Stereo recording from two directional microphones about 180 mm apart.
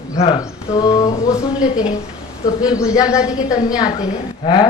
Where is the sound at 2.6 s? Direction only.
20° left (ahead or behind).